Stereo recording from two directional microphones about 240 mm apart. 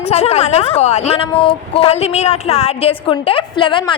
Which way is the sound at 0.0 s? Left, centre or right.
Left.